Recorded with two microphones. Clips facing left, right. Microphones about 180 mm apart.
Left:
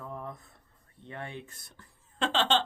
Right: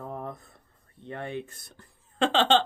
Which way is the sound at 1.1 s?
60° right (ahead or behind).